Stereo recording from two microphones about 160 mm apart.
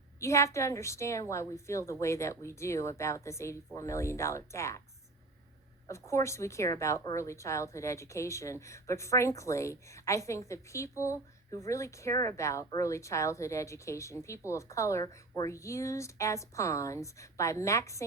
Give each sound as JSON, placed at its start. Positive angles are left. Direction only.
{"t": 0.2, "sound": "a woman's voice", "side_deg": 20}
{"t": 5.9, "sound": "a woman's voice", "side_deg": 15}